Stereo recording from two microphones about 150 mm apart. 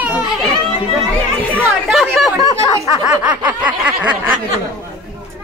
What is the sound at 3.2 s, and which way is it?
Snicker, 25° right (ahead or behind).